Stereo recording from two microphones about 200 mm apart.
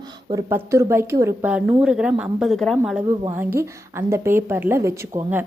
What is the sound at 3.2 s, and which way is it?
A woman's voice, 10° right (ahead or behind).